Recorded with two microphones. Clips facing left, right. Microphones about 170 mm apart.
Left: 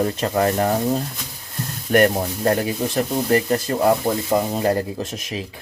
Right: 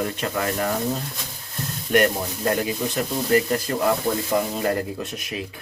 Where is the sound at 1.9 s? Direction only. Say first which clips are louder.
Left 3 dB; 45° left (ahead or behind).